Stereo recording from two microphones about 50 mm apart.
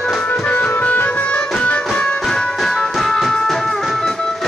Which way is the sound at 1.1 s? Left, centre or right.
Left.